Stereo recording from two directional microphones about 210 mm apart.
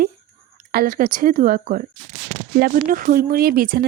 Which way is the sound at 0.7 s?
45° right (ahead or behind).